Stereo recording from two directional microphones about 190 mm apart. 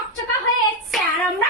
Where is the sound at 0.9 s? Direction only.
Centre (ahead or behind).